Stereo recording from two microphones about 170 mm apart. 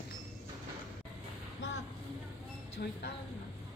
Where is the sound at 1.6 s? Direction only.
90° left.